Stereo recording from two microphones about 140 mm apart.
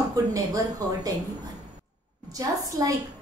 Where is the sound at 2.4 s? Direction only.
25° right (ahead or behind).